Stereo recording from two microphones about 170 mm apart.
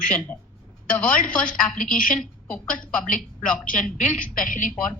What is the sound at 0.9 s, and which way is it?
Speech, 5° left (ahead or behind).